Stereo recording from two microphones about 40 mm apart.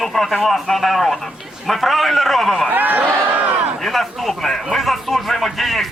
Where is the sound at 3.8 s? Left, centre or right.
Centre.